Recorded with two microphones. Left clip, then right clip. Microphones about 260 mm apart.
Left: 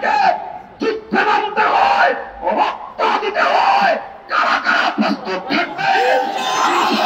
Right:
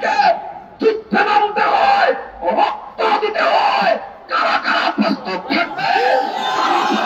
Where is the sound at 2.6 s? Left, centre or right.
Right.